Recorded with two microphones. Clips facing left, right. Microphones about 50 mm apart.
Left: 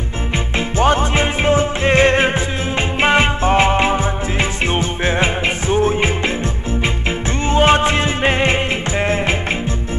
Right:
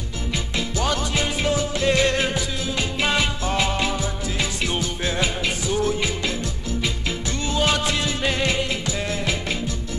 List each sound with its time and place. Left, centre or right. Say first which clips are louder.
0.7 s music: left 10 dB; left
7.4 s music: left 9 dB; left